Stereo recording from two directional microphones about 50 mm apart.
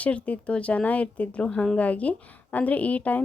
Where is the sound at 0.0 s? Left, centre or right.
Left.